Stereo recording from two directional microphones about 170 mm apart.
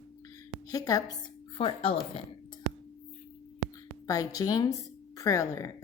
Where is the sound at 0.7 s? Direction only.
20° left (ahead or behind).